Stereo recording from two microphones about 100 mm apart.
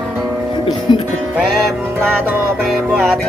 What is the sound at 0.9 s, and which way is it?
Music, 55° left (ahead or behind).